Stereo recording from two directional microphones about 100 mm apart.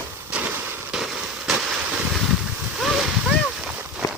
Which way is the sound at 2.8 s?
Centre (ahead or behind).